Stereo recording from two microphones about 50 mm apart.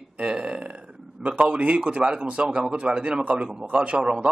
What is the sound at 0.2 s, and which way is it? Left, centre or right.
A man's voice, right.